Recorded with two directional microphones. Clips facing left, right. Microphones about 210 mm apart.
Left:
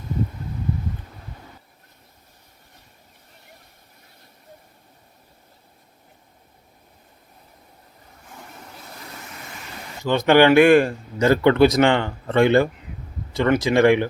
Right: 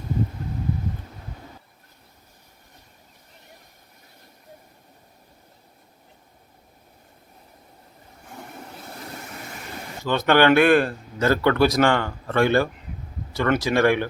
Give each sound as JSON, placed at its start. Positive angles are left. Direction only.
{"t": 10.0, "sound": "speech", "side_deg": 15}